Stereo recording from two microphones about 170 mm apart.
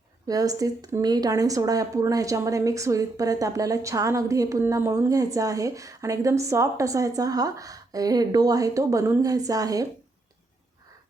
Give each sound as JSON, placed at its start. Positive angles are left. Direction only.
{"t": 0.3, "sound": "speech", "side_deg": -20}